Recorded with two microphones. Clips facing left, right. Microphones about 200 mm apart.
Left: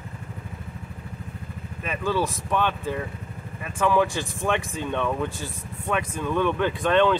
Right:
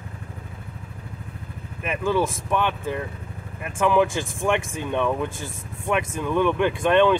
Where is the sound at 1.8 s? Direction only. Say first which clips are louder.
Right 3 dB; 15° right (ahead or behind).